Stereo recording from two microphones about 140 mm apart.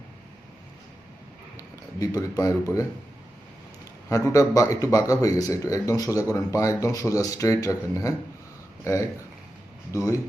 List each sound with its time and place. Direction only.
1.5 s speech: 25° left (ahead or behind)
4.1 s speech: 20° left (ahead or behind)